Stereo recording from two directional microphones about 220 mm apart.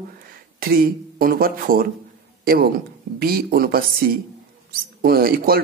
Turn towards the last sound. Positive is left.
turn(degrees=-45)  # may be behind; listen again after turning